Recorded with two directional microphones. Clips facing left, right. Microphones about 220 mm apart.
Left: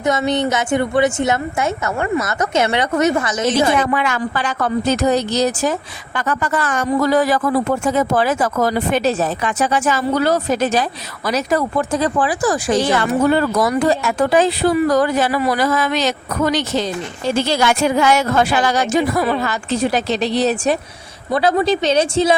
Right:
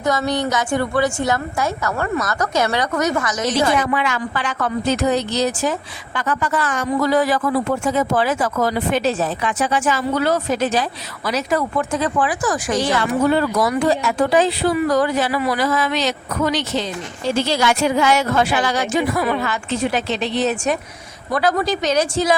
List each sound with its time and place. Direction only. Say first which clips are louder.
0.0 s a woman's voice: left 2 dB; 20° left (ahead or behind)
3.8 s speech: left 2 dB; 50° left (ahead or behind); by 12.8 s 30° left (ahead or behind)
13.3 s a woman's voice: left 2 dB; 45° left (ahead or behind); by 22.4 s 25° left (ahead or behind)